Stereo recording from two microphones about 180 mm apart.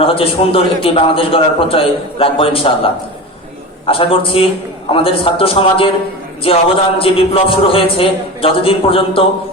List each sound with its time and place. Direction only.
0.0 s a man's voice: 30° left (ahead or behind)